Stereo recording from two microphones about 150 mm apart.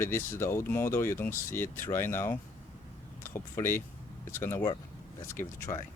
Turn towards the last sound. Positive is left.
turn(degrees=35)  # may be behind; listen again after turning